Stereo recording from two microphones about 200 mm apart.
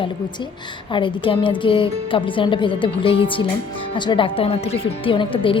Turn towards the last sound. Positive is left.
turn(degrees=25)  # may be behind; listen again after turning